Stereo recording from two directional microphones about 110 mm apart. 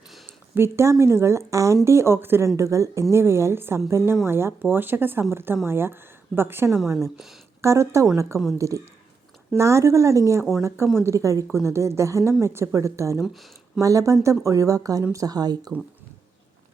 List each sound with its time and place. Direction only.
0.5 s speech: 25° right (ahead or behind)
13.2 s speech: centre (ahead or behind)
13.8 s speech: 30° right (ahead or behind)